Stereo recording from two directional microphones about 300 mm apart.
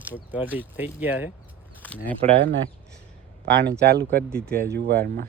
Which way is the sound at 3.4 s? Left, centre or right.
Right.